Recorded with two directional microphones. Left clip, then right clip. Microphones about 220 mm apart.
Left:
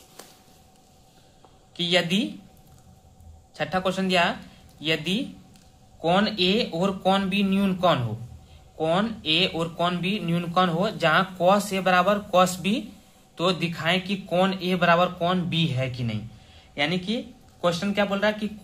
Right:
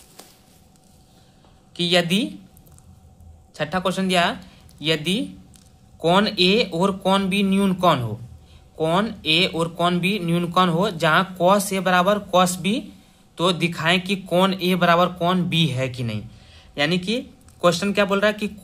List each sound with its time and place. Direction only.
1.7 s speech: 30° right (ahead or behind)
3.5 s speech: 25° right (ahead or behind)